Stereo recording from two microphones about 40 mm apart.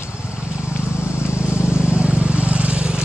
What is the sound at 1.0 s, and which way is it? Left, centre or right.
Vehicle, right.